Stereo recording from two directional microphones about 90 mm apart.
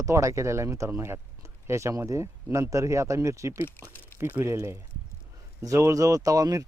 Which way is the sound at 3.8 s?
25° left (ahead or behind).